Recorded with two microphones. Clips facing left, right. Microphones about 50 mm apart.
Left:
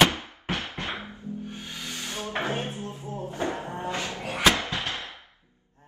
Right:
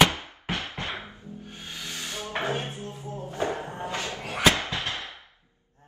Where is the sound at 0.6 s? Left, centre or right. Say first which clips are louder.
Even; right.